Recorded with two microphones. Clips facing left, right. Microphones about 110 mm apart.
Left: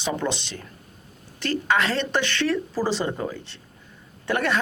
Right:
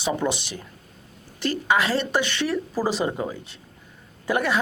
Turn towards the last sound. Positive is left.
turn(degrees=-5)  # may be behind; listen again after turning